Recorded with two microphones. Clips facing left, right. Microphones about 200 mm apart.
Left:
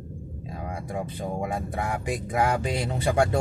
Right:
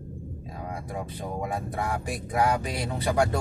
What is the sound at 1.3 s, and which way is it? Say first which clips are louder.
Speech: left 1 dB; 20° left (ahead or behind).